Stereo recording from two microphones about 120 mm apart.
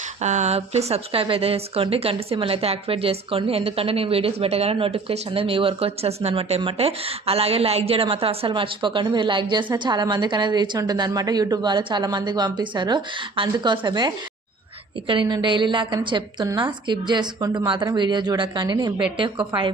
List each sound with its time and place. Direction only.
0.2 s a woman's voice: 75° right (ahead or behind); by 19.7 s 45° right (ahead or behind)